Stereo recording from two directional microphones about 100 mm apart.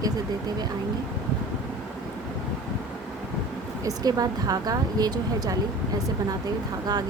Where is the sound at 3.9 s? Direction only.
35° right (ahead or behind).